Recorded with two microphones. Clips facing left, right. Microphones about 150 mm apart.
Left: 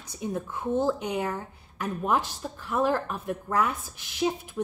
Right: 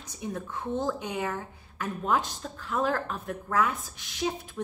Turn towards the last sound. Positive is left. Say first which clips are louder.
# left 3 dB
turn(degrees=10)  # may be behind; listen again after turning